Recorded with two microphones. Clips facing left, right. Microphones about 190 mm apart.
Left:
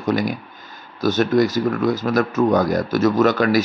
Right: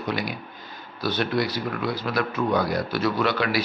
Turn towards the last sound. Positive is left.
turn(degrees=45)  # may be behind; listen again after turning